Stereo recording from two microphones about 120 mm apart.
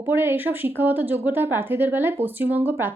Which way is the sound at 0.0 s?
20° right (ahead or behind).